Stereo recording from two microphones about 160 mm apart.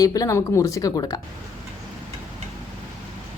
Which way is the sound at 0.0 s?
20° left (ahead or behind).